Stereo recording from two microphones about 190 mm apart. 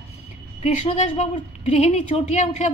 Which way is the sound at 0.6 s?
35° left (ahead or behind).